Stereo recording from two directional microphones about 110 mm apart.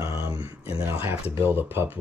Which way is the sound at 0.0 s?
25° right (ahead or behind).